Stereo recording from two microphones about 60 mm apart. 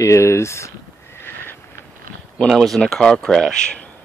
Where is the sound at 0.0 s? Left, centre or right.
Left.